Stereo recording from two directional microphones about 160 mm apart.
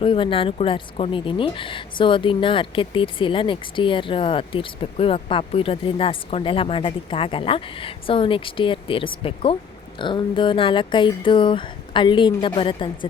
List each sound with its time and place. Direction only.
0.0 s speech: 35° left (ahead or behind)